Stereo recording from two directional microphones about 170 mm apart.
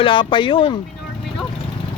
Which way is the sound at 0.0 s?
30° left (ahead or behind).